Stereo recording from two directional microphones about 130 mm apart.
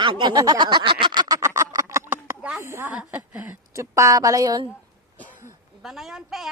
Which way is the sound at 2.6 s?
20° right (ahead or behind).